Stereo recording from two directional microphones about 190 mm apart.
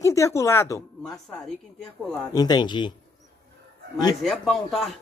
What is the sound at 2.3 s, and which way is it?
Speech, 20° left (ahead or behind).